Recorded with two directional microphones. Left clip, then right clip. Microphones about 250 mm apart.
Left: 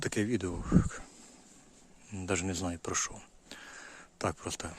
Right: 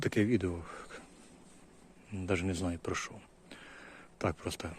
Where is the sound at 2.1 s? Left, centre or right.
Centre.